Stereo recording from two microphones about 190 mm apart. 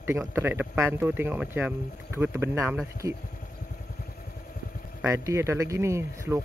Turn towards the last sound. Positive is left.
turn(degrees=-15)  # may be behind; listen again after turning